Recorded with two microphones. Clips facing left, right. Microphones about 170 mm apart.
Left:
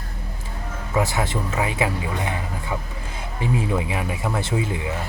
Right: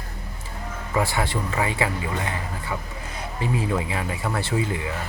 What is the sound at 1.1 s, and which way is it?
Speech, 5° left (ahead or behind).